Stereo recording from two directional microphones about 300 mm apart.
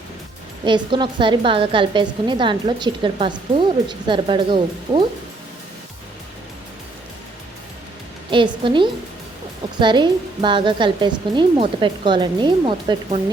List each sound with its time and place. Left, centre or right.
0.6 s a woman's voice: centre
8.3 s a woman's voice: centre